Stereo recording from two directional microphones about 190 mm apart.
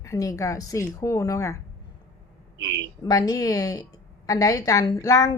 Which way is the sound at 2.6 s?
70° right (ahead or behind).